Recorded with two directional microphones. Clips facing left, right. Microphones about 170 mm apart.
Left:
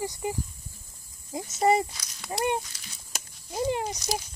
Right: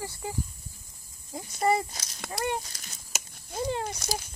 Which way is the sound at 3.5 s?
15° left (ahead or behind).